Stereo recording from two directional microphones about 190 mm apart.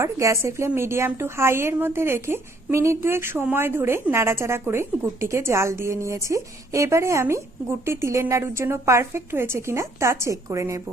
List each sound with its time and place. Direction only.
0.0 s a woman's voice: 15° right (ahead or behind)